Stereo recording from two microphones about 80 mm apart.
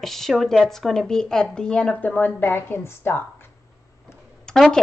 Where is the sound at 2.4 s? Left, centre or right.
Left.